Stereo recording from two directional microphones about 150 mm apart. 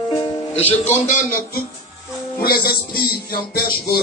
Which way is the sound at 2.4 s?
90° left.